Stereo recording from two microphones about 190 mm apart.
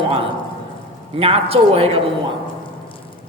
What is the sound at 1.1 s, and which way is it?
Speech, 30° right (ahead or behind).